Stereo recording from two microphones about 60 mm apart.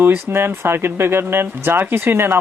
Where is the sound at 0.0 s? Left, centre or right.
Right.